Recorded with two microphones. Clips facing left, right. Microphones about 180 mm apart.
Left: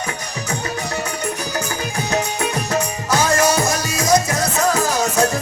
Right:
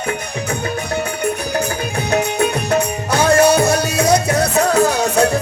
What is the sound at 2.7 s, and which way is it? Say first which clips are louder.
Music: right 1 dB; 60° right (ahead or behind).